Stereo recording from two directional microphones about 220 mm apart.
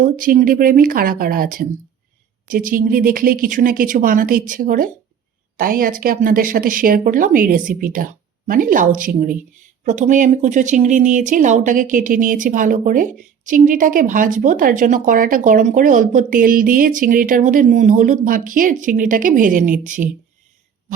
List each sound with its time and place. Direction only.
0.0 s a woman's voice: 40° right (ahead or behind)